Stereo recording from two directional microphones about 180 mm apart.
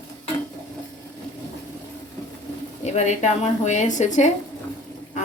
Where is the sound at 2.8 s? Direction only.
40° left (ahead or behind).